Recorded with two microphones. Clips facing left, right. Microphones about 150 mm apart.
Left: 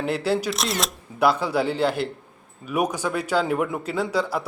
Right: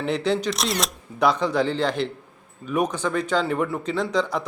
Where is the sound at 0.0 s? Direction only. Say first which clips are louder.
Even; 5° left (ahead or behind).